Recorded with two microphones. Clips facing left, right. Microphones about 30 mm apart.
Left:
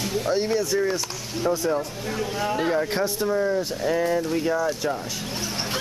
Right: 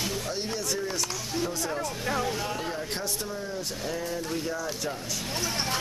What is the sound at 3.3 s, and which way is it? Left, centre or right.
Speech, left.